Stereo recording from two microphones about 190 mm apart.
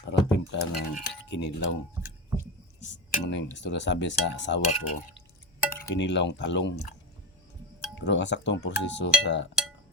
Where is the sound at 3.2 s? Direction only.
65° left (ahead or behind).